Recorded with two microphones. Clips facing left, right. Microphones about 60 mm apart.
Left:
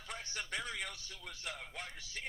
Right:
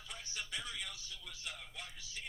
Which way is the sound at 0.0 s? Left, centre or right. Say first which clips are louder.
Left 3 dB; left.